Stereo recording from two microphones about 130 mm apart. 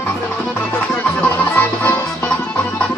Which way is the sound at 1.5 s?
15° left (ahead or behind).